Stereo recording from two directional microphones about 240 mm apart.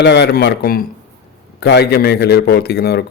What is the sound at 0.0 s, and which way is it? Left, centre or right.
Speech, left.